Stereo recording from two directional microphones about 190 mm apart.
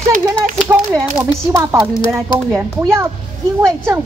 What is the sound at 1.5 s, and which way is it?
A woman's voice, 15° right (ahead or behind).